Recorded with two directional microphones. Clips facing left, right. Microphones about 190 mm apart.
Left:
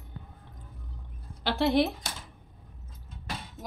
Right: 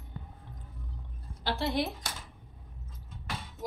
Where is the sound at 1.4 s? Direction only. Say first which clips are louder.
Left 6 dB; 70° left (ahead or behind).